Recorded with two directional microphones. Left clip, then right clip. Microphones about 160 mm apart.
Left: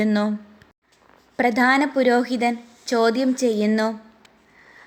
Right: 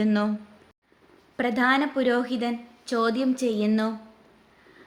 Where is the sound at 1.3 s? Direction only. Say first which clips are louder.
Left 5 dB; 35° left (ahead or behind).